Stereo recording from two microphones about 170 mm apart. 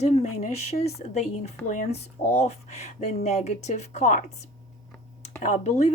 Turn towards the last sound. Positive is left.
turn(degrees=45)  # may be behind; listen again after turning